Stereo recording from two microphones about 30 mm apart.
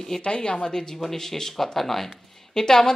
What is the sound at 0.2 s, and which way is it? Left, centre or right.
Speech, left.